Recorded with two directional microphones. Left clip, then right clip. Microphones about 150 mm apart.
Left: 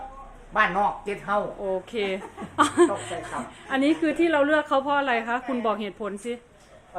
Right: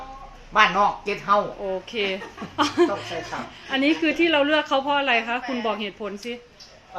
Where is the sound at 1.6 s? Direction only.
20° left (ahead or behind).